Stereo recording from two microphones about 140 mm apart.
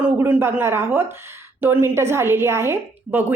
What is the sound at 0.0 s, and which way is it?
A woman's voice, 10° right (ahead or behind).